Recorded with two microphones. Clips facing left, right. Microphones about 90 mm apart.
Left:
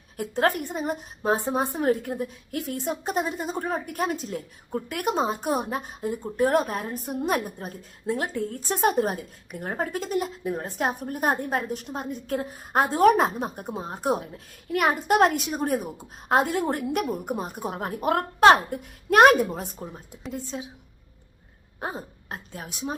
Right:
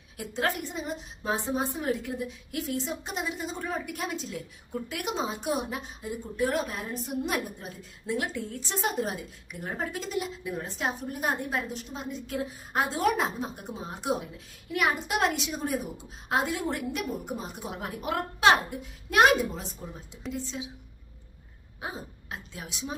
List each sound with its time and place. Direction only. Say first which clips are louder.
0.2 s a woman's voice: left 6 dB; 50° left (ahead or behind)
21.8 s speech: left 5 dB; 45° left (ahead or behind)